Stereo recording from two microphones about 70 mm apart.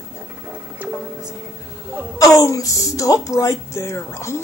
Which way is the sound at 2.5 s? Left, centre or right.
Left.